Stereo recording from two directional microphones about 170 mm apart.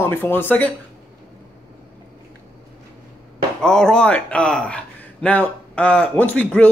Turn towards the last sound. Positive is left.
turn(degrees=10)  # may be behind; listen again after turning